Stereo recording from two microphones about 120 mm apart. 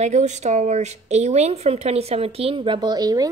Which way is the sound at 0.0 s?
75° right (ahead or behind).